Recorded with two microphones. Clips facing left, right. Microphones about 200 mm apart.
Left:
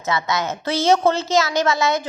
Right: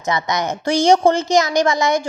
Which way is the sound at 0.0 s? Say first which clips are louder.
Right 2 dB; 15° right (ahead or behind).